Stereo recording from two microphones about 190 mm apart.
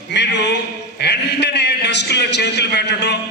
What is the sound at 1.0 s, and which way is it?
A man's voice, 60° left (ahead or behind).